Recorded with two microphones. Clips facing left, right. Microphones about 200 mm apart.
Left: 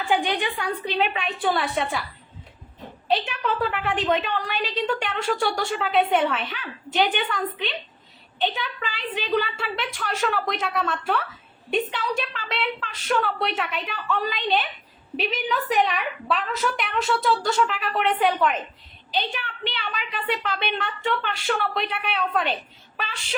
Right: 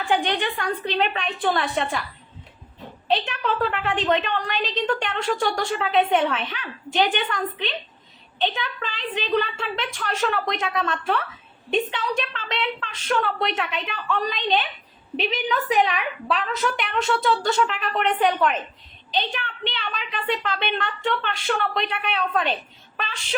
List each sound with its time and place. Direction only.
0.0 s a woman's voice: 5° left (ahead or behind)
3.1 s a woman's voice: 5° left (ahead or behind)